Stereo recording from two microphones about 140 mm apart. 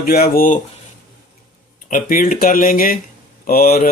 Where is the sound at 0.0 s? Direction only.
90° left.